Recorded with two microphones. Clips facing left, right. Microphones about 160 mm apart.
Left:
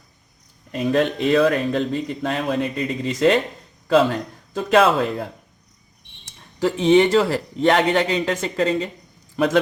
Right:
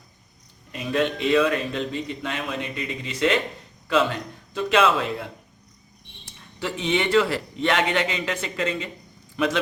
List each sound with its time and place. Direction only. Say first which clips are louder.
0.7 s a man's voice: left 5 dB; 45° left (ahead or behind)